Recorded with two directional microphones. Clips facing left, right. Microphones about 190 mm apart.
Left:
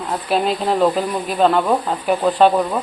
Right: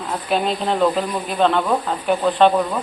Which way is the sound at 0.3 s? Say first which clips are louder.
Left 2 dB; centre (ahead or behind).